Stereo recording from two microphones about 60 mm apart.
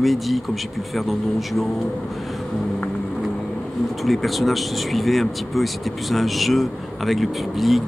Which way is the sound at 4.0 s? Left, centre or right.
Centre.